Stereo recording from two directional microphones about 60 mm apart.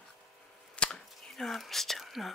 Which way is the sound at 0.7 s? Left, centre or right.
Centre.